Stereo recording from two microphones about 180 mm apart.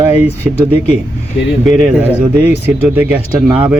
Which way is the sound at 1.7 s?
15° right (ahead or behind).